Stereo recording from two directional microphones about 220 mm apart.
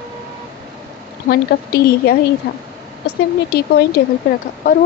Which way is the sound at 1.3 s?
45° left (ahead or behind).